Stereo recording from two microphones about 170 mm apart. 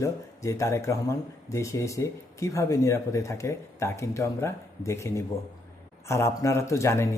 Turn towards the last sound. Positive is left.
turn(degrees=15)  # may be behind; listen again after turning